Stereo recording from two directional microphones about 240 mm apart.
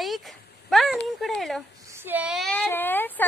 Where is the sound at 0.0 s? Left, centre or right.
Centre.